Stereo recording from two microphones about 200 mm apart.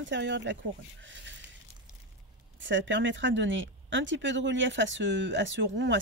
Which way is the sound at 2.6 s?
65° right (ahead or behind).